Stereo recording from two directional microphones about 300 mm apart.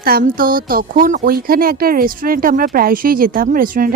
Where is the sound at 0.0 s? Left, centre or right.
Right.